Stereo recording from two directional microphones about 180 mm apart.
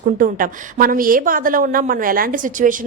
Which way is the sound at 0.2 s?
50° right (ahead or behind).